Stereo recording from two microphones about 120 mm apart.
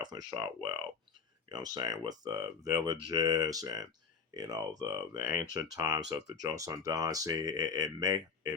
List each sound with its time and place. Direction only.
0.0 s speech: 35° right (ahead or behind)